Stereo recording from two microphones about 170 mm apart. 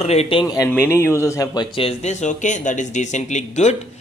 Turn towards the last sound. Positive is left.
turn(degrees=40)  # may be behind; listen again after turning